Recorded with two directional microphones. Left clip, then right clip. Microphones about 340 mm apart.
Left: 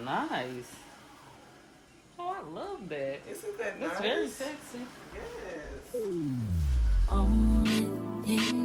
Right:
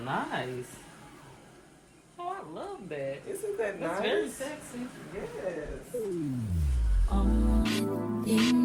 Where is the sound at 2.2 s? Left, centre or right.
Left.